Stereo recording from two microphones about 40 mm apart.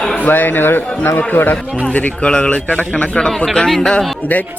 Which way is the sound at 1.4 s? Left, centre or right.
Left.